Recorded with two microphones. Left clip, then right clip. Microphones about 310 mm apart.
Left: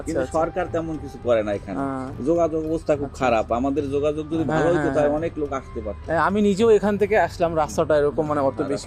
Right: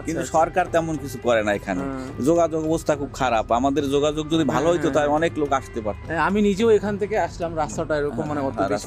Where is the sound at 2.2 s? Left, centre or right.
Right.